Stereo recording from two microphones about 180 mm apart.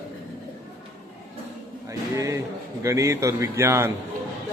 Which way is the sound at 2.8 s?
15° right (ahead or behind).